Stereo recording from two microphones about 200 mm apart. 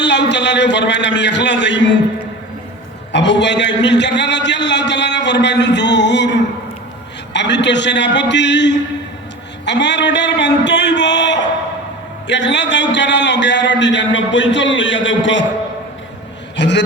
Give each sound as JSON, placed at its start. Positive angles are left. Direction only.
{"t": 0.0, "sound": "a man's voice", "side_deg": 60}
{"t": 3.1, "sound": "a man's voice", "side_deg": 60}
{"t": 16.6, "sound": "a man's voice", "side_deg": 60}